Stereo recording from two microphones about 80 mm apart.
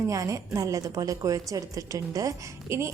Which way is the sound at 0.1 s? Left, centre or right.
Right.